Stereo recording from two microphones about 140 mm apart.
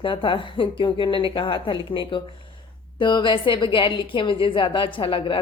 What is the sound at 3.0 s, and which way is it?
A woman's voice, 35° left (ahead or behind).